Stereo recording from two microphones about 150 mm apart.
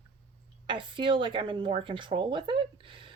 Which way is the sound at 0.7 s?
35° right (ahead or behind).